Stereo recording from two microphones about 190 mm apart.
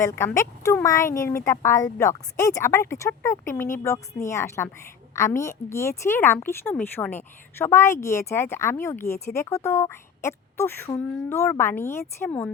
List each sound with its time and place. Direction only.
0.0 s a woman's voice: 15° left (ahead or behind)